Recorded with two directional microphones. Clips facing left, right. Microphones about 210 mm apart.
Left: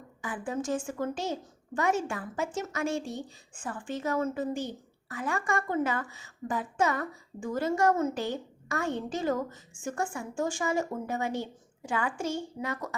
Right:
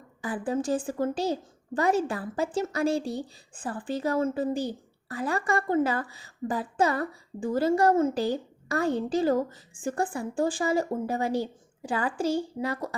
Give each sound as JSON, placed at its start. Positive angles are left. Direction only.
{"t": 0.2, "sound": "a woman's voice", "side_deg": -35}